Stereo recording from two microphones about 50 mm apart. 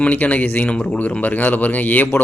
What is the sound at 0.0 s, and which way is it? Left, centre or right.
Speech, left.